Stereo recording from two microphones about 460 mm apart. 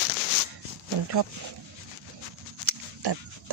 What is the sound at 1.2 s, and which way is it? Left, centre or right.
Speech, right.